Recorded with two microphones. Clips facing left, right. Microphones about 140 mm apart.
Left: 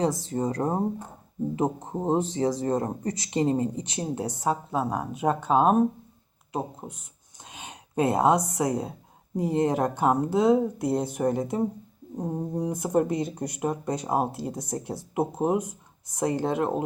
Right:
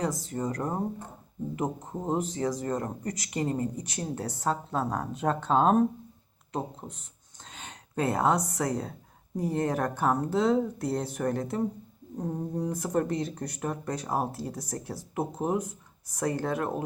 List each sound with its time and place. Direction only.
0.0 s speech: 30° left (ahead or behind)